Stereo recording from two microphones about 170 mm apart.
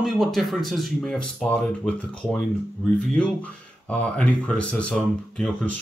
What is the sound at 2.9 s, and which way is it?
Speech, 5° left (ahead or behind).